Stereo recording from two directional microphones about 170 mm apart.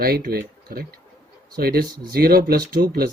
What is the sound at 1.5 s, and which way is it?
Speech, 65° right (ahead or behind).